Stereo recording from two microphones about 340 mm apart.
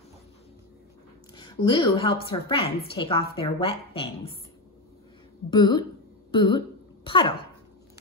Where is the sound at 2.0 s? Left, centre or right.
Centre.